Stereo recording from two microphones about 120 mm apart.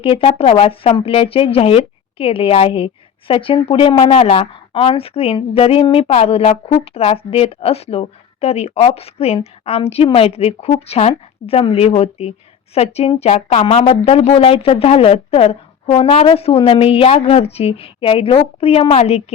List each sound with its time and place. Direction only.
0.0 s speech: 50° left (ahead or behind)
4.1 s speech: 55° left (ahead or behind)
13.5 s speech: 55° left (ahead or behind)